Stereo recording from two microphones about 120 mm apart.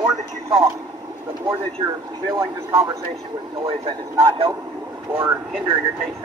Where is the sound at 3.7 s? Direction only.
50° right (ahead or behind).